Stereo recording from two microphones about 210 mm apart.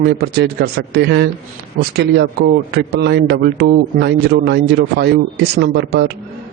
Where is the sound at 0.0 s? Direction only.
50° right (ahead or behind).